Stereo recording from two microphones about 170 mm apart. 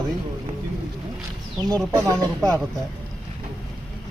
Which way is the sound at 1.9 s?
20° right (ahead or behind).